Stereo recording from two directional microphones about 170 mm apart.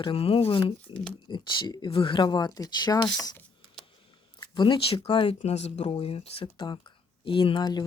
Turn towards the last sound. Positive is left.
turn(degrees=25)  # may be behind; listen again after turning